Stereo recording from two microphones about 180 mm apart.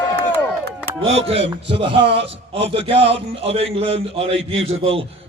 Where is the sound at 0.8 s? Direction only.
35° right (ahead or behind).